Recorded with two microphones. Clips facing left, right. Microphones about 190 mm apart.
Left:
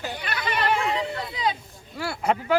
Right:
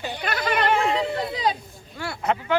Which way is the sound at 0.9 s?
35° right (ahead or behind).